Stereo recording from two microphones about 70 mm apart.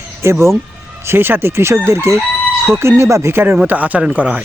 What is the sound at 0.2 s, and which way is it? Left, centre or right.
Speech, right.